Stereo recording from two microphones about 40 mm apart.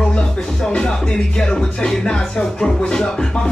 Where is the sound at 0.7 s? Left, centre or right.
Centre.